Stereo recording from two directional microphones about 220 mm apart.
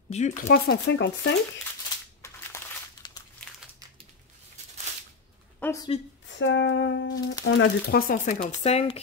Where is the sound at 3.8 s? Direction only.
15° right (ahead or behind).